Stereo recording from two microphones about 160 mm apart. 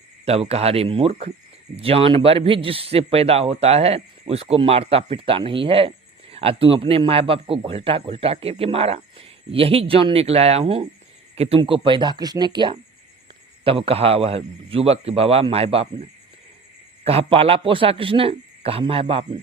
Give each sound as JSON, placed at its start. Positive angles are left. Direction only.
{"t": 0.3, "sound": "a man's voice", "side_deg": -40}
{"t": 17.1, "sound": "a man's voice", "side_deg": -35}